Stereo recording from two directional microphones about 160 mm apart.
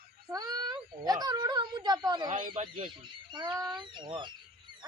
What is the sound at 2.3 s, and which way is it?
Speech, 50° right (ahead or behind).